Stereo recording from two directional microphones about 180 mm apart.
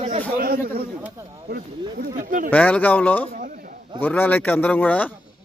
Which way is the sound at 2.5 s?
10° left (ahead or behind).